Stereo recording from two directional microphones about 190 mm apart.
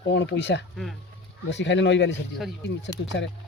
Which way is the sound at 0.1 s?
70° left (ahead or behind).